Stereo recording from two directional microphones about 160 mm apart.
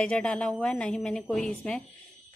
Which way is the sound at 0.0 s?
5° left (ahead or behind).